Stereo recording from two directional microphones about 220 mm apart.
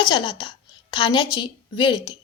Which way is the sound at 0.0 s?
20° left (ahead or behind).